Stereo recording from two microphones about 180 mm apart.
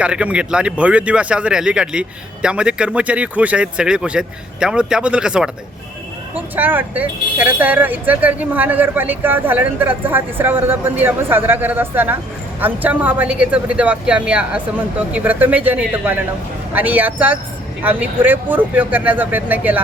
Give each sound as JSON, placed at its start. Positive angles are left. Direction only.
{"t": 0.0, "sound": "speech", "side_deg": -5}